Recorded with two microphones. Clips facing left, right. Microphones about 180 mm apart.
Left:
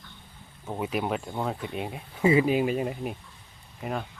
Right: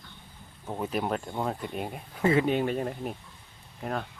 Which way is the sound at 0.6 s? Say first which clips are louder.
Left 1 dB; 5° left (ahead or behind).